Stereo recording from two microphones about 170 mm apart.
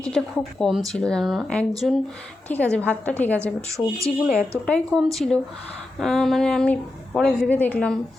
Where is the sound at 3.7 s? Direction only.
20° right (ahead or behind).